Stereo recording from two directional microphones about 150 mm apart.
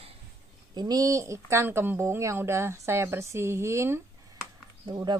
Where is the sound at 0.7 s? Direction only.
25° right (ahead or behind).